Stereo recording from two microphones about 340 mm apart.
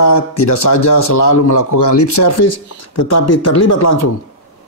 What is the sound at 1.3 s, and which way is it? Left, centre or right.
Speech, left.